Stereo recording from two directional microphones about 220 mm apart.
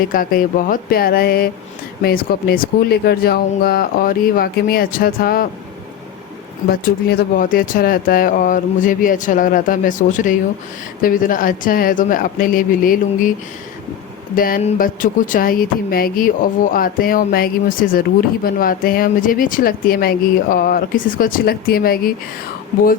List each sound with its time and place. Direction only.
0.0 s speech: 40° left (ahead or behind)
6.7 s speech: 45° left (ahead or behind)
14.3 s speech: 40° left (ahead or behind)